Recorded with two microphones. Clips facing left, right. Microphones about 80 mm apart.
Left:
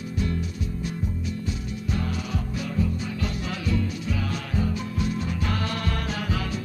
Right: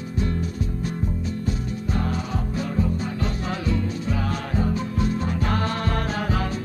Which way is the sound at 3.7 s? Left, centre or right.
Right.